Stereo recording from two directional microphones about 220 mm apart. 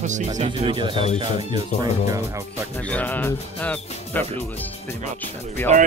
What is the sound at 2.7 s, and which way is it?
Speech, 5° left (ahead or behind).